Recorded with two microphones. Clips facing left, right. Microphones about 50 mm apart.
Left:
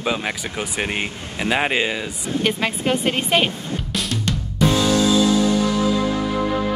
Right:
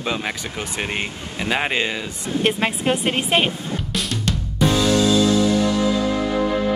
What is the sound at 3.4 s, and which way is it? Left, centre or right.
Music, centre.